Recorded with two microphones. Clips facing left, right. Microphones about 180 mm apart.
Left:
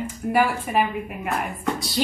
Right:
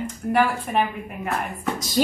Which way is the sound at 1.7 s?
45° right (ahead or behind).